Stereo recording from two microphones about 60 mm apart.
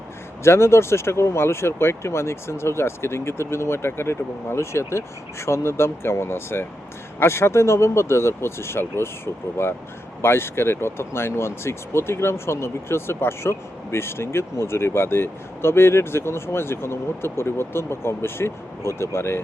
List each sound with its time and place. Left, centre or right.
0.4 s speech: left